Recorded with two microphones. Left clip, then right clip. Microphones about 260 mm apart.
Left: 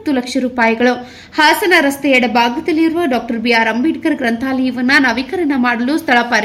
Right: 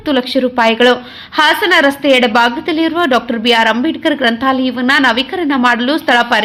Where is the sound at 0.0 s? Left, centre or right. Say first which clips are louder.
Right 4 dB; centre.